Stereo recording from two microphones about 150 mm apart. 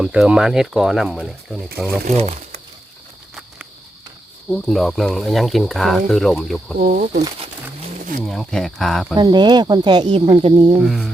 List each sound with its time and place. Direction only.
0.0 s speech: 5° right (ahead or behind)
2.1 s speech: 45° right (ahead or behind)
4.4 s speech: centre (ahead or behind)
6.7 s speech: 70° right (ahead or behind)
7.8 s wild animals: 55° right (ahead or behind)
8.2 s speech: centre (ahead or behind)
9.1 s speech: 30° right (ahead or behind)
10.8 s speech: 5° right (ahead or behind)